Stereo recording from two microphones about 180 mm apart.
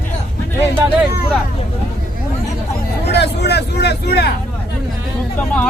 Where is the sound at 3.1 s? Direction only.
70° left (ahead or behind).